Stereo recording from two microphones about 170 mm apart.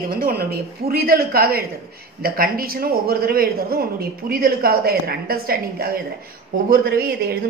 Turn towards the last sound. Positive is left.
turn(degrees=-65)  # may be behind; listen again after turning